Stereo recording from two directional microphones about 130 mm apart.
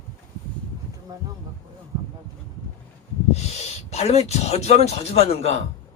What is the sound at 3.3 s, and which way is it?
Speech, 55° left (ahead or behind).